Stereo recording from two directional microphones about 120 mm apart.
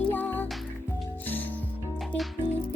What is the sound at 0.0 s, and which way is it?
Music, 15° left (ahead or behind).